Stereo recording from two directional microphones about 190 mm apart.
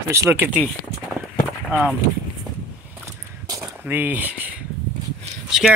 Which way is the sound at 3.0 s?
15° right (ahead or behind).